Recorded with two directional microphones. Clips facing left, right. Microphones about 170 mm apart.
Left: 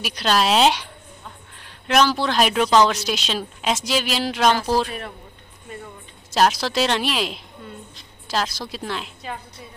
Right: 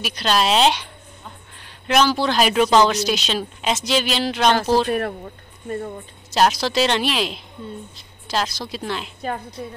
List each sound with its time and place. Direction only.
0.0 s a woman's voice: 5° left (ahead or behind)
5.7 s speech: 45° right (ahead or behind)
6.3 s a woman's voice: centre (ahead or behind)